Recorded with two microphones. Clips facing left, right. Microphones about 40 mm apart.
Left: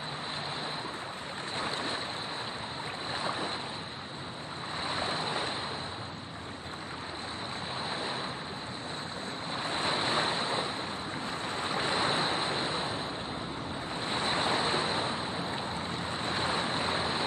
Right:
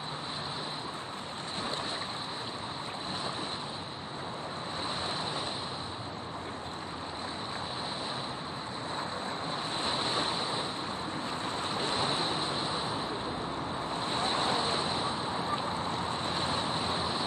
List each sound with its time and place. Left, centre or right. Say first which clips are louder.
5.1 s waves: left 2 dB; left
9.8 s vehicle: left 3 dB; left
10.3 s vehicle: left 2 dB; centre
11.7 s waves: left 3 dB; left
12.5 s vehicle: left 1 dB; left
14.0 s vehicle: left 1 dB; centre
15.9 s vehicle: right 2 dB; centre
16.3 s vehicle: left 4 dB; left